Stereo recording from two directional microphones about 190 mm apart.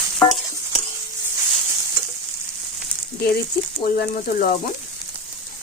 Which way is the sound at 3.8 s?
50° left (ahead or behind).